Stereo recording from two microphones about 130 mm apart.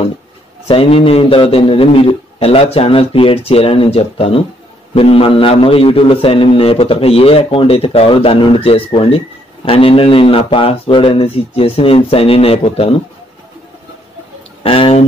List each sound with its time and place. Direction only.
0.7 s a man's voice: 45° left (ahead or behind)
14.6 s speech: 45° left (ahead or behind)